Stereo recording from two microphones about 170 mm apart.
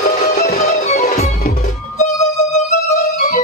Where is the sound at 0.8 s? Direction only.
45° left (ahead or behind).